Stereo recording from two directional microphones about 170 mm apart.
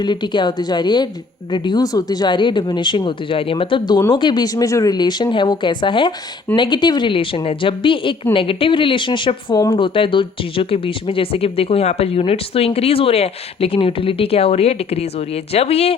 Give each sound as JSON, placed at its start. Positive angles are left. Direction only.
{"t": 0.0, "sound": "a woman's voice", "side_deg": 25}